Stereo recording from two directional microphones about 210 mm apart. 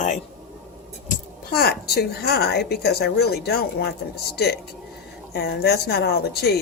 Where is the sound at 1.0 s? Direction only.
45° left (ahead or behind).